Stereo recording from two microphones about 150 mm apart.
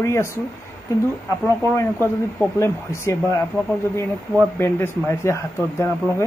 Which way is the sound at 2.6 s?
20° left (ahead or behind).